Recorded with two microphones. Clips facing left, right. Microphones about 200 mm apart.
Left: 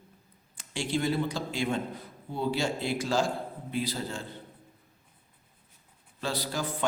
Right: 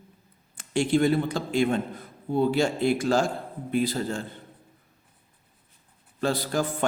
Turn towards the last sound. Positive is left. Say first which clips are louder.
# right 7 dB
turn(degrees=-50)  # may be behind; listen again after turning